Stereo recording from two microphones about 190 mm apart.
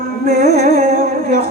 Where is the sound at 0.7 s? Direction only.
50° right (ahead or behind).